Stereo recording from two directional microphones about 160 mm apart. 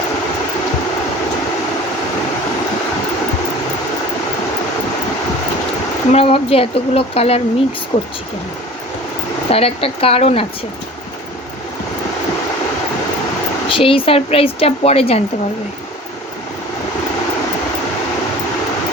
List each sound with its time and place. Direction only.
6.1 s speech: 40° left (ahead or behind)
9.5 s speech: 35° left (ahead or behind)
13.7 s speech: 35° left (ahead or behind)